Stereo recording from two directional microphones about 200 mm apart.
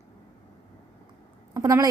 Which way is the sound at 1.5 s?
20° right (ahead or behind).